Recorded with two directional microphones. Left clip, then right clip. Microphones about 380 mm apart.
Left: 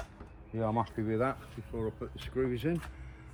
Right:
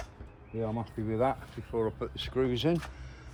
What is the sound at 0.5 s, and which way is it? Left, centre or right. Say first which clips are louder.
Speech: left 3 dB; left.